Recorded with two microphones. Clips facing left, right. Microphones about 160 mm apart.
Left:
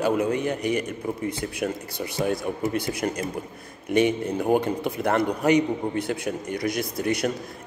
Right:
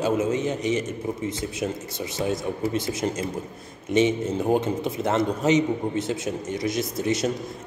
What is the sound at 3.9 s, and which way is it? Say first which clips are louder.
A man's voice: even; 25° right (ahead or behind).